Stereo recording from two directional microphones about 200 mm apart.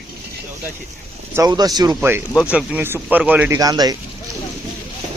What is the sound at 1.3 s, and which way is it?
Speech, 20° right (ahead or behind).